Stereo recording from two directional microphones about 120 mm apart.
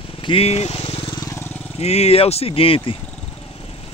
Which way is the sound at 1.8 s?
60° left (ahead or behind).